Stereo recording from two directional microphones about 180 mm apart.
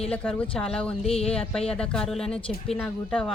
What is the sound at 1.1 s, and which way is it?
Music, 35° left (ahead or behind).